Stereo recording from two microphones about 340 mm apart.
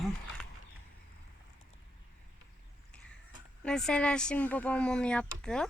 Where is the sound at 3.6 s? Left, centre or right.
Centre.